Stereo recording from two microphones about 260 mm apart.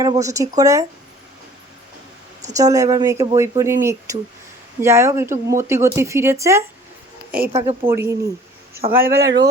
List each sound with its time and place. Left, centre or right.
0.0 s speech: centre
2.6 s speech: centre
8.9 s speech: right